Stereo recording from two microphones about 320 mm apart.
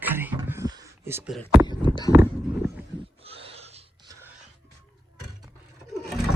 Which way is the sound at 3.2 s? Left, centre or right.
Centre.